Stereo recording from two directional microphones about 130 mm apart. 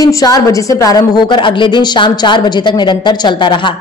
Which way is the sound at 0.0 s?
25° left (ahead or behind).